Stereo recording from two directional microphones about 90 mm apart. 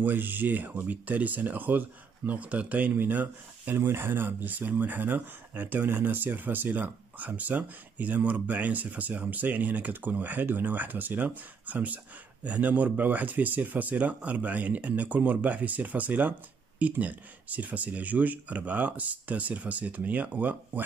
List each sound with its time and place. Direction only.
0.0 s speech: 20° right (ahead or behind)